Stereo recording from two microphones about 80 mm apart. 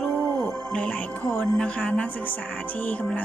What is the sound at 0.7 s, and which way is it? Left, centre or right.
Speech, centre.